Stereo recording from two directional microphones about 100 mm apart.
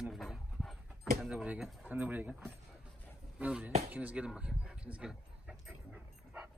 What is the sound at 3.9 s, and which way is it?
Dog, 15° right (ahead or behind).